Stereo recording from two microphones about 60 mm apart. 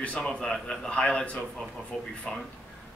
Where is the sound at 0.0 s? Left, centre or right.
Centre.